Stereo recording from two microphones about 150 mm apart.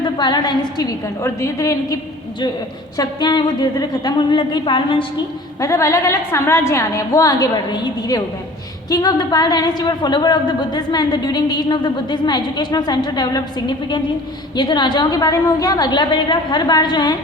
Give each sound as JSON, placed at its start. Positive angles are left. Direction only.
{"t": 0.0, "sound": "a woman's voice", "side_deg": 30}
{"t": 3.0, "sound": "a woman's voice", "side_deg": 30}
{"t": 5.5, "sound": "a woman's voice", "side_deg": 20}